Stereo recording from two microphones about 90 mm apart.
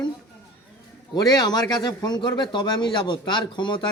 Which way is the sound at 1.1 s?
45° left (ahead or behind).